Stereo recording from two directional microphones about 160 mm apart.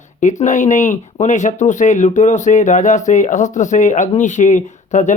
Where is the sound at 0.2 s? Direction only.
50° left (ahead or behind).